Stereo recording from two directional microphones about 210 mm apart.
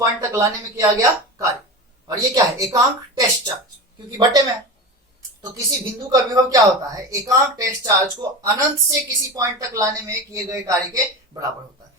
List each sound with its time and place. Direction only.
0.0 s speech: 15° right (ahead or behind)
5.5 s speech: 15° right (ahead or behind)